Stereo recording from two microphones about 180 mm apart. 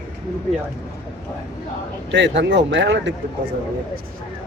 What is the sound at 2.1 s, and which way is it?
Speech, 85° right.